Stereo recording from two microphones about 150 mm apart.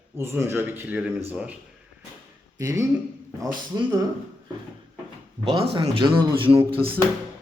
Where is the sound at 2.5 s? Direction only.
20° right (ahead or behind).